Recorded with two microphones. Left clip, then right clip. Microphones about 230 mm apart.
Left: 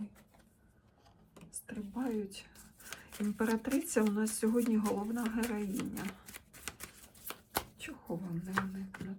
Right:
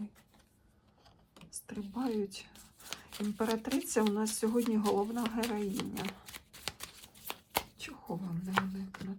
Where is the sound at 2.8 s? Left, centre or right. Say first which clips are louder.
Right 1 dB; centre.